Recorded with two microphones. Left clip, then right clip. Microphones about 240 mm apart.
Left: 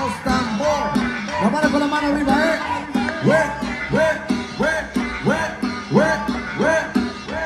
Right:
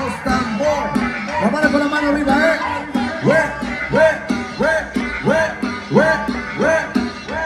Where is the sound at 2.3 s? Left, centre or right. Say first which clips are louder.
Right 3 dB; left.